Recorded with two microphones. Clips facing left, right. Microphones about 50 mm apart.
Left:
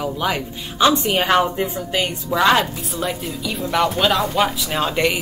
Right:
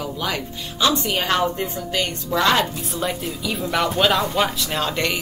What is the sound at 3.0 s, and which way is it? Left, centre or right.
Speech, centre.